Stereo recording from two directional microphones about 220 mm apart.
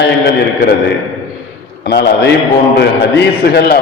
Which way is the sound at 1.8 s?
50° left (ahead or behind).